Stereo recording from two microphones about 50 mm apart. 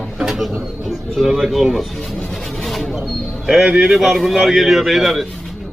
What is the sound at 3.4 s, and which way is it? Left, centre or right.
A man's voice, centre.